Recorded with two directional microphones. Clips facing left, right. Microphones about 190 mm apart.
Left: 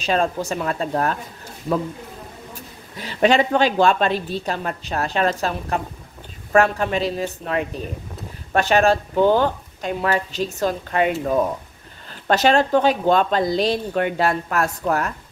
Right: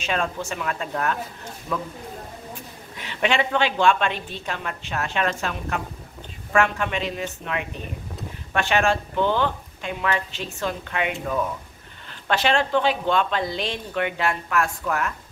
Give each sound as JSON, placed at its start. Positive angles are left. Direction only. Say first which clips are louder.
{"t": 0.0, "sound": "speech", "louder": "left 5 dB", "side_deg": 35}
{"t": 3.0, "sound": "speech", "louder": "left 6 dB", "side_deg": 40}